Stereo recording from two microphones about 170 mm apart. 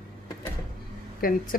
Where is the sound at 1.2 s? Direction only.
55° left (ahead or behind).